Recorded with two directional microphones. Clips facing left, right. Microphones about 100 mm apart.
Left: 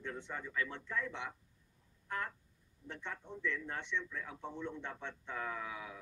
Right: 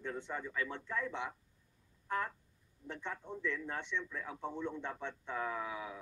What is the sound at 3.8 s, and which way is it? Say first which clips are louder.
Speech: even; 40° right (ahead or behind).